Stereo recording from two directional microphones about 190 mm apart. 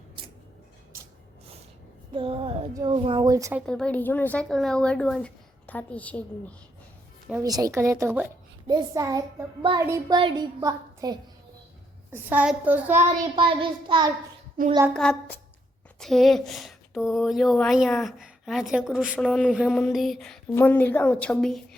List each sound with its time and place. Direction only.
2.1 s a sound: 30° right (ahead or behind)
2.7 s a child's voice: 25° right (ahead or behind)
3.7 s a woman's voice: 5° left (ahead or behind)
7.4 s a woman's voice: 20° right (ahead or behind)
12.1 s a woman's voice: 10° right (ahead or behind)
13.3 s a child's voice: 25° right (ahead or behind)
14.9 s a woman's voice: 5° left (ahead or behind)